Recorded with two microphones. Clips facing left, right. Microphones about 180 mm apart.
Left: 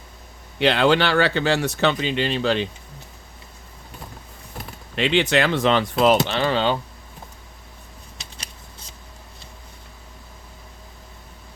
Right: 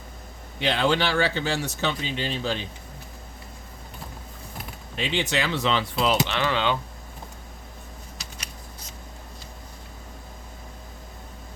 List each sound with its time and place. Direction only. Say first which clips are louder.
0.6 s speech: left 5 dB; 70° left (ahead or behind)
4.9 s speech: left 7 dB; 70° left (ahead or behind); by 6.3 s 45° left (ahead or behind)
6.3 s speech: left 4 dB; 35° left (ahead or behind)